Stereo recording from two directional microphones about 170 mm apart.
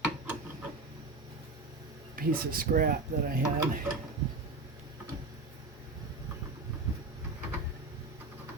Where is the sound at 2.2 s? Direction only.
60° right (ahead or behind).